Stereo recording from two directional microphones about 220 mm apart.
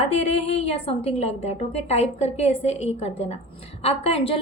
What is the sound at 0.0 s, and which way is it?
A woman's voice, 30° left (ahead or behind).